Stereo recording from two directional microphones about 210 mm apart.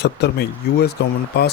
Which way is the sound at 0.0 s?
50° left (ahead or behind).